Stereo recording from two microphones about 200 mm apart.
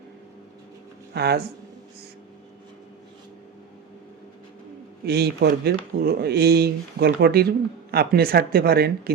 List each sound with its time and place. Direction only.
1.1 s speech: 55° right (ahead or behind)
5.0 s speech: 55° right (ahead or behind)